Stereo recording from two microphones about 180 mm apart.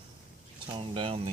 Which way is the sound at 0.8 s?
30° right (ahead or behind).